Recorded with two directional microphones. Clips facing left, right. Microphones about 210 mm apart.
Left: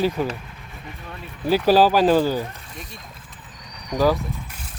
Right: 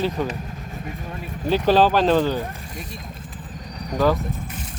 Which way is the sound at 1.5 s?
5° left (ahead or behind).